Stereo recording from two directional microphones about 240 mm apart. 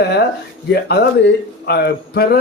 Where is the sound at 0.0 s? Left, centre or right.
Left.